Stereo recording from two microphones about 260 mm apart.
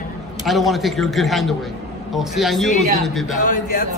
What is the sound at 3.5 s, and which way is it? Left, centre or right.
Speech, left.